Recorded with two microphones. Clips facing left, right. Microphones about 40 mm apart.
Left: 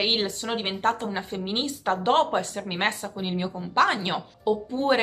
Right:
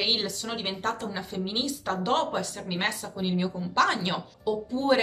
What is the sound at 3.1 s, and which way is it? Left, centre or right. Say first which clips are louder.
A woman's voice: right 1 dB; left.